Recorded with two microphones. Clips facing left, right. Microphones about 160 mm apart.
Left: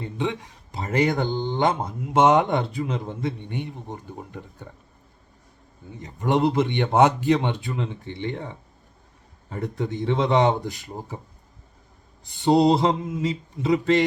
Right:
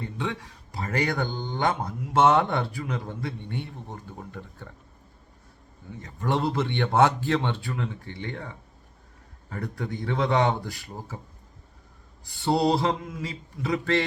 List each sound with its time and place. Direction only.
0.2 s speech: 20° left (ahead or behind)
6.0 s speech: 20° left (ahead or behind)
12.2 s speech: 20° left (ahead or behind)